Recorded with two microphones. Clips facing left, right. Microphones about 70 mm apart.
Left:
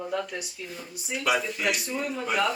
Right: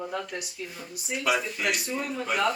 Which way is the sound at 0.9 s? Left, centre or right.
Centre.